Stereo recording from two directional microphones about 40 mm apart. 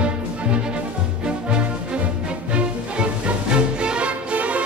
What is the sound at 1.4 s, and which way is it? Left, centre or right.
Music, right.